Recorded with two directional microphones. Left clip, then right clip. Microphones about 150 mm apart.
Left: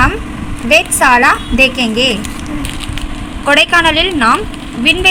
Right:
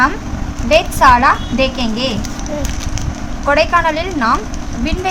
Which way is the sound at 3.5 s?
25° left (ahead or behind).